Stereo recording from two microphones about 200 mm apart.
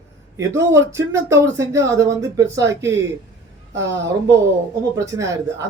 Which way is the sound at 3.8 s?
65° right (ahead or behind).